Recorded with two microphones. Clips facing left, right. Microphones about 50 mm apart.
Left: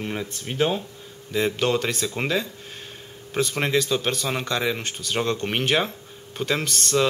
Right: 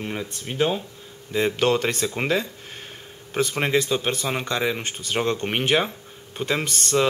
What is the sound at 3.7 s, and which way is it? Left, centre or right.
Speech, right.